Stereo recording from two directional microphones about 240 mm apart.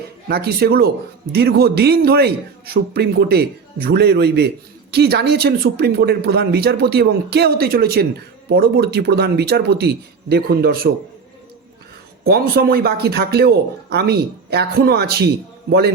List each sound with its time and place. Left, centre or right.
0.3 s speech: right
12.2 s speech: right